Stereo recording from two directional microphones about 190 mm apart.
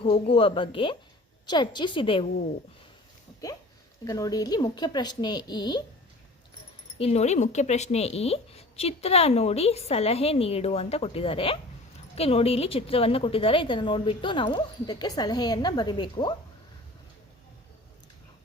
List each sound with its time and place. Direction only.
0.0 s a woman's voice: 30° left (ahead or behind)
4.0 s a woman's voice: 20° left (ahead or behind)
7.0 s a woman's voice: 35° left (ahead or behind)